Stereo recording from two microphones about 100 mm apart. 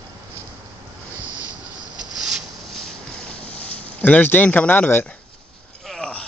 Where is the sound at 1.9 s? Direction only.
5° right (ahead or behind); by 5.0 s 20° left (ahead or behind).